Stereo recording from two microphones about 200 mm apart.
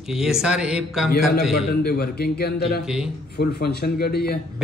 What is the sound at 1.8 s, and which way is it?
A man's voice, 50° left (ahead or behind).